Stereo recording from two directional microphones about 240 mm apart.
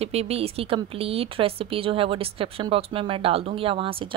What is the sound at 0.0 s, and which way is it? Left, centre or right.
Speech, right.